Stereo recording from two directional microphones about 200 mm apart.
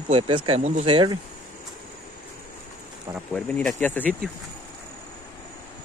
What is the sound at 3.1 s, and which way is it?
Speech, 5° left (ahead or behind).